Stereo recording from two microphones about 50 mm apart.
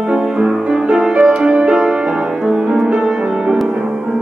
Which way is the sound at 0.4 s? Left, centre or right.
Centre.